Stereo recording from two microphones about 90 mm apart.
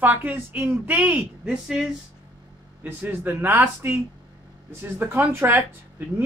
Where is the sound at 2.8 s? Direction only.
25° right (ahead or behind).